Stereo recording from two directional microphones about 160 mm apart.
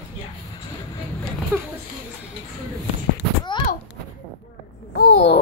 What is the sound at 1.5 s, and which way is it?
Children playing, 15° right (ahead or behind).